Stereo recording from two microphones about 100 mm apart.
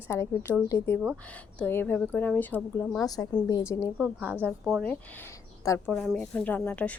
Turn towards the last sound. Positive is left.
turn(degrees=15)  # may be behind; listen again after turning